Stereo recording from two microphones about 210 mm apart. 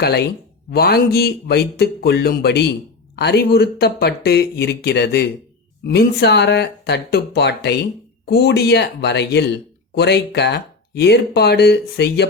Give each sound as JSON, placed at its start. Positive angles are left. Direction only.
{"t": 0.0, "sound": "speech", "side_deg": 50}